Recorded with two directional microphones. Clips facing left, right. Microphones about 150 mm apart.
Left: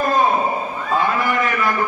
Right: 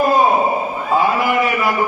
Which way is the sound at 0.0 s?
20° right (ahead or behind).